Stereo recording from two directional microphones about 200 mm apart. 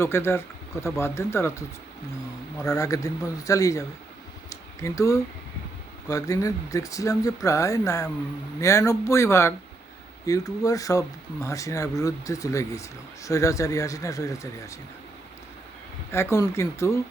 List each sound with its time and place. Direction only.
0.0 s speech: 10° left (ahead or behind)
4.4 s a sound: 15° left (ahead or behind)
6.1 s speech: 15° left (ahead or behind)
16.1 s speech: 15° left (ahead or behind)